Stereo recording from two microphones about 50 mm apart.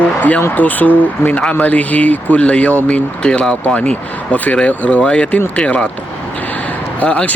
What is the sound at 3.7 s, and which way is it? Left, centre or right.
Speech, left.